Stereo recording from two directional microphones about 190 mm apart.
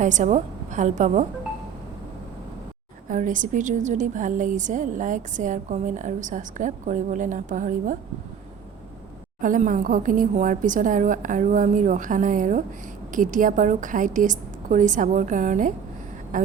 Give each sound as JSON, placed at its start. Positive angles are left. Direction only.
{"t": 0.0, "sound": "a woman's voice", "side_deg": -40}
{"t": 3.1, "sound": "a woman's voice", "side_deg": -45}
{"t": 9.4, "sound": "a woman's voice", "side_deg": -45}